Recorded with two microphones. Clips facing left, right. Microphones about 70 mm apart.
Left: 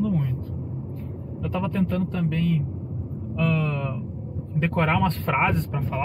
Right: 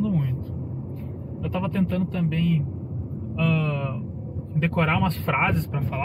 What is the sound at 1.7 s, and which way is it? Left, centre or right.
Speech, centre.